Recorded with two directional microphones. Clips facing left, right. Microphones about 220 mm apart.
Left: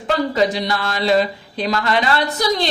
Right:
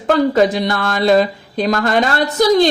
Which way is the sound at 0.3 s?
50° right (ahead or behind).